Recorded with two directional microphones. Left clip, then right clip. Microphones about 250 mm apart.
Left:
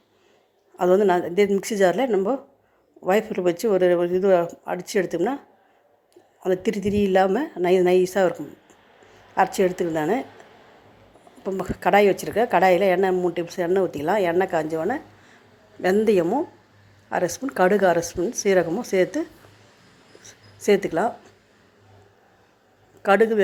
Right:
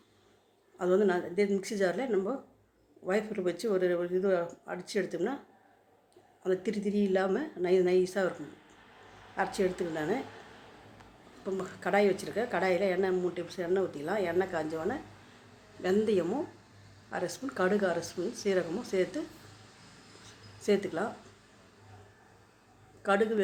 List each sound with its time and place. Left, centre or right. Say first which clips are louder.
0.8 s a woman's voice: left 9 dB; left
6.4 s speech: left 9 dB; left
11.4 s a woman's voice: left 11 dB; left
20.6 s speech: left 10 dB; left
23.0 s speech: left 10 dB; left